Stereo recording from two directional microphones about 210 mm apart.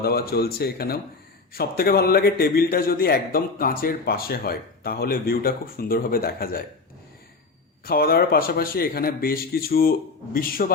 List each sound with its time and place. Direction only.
0.0 s a man's voice: 45° left (ahead or behind)
7.9 s a man's voice: 45° left (ahead or behind)